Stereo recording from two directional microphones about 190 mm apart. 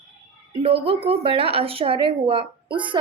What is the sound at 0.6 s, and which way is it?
Speech, 30° right (ahead or behind).